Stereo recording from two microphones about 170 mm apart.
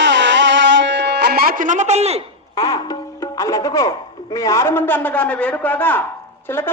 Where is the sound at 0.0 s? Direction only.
90° right; by 2.2 s 40° right (ahead or behind).